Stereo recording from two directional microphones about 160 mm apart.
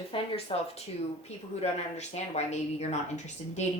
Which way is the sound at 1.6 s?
45° left (ahead or behind).